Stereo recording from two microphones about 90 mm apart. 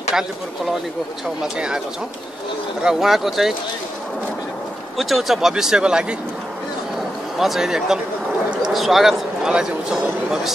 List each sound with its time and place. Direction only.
1.4 s speech: 10° right (ahead or behind)
2.8 s a man's voice: 5° right (ahead or behind)
4.9 s speech: centre (ahead or behind)
7.3 s a man's voice: 5° right (ahead or behind)